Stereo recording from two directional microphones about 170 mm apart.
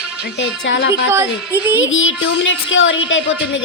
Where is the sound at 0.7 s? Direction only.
90° left.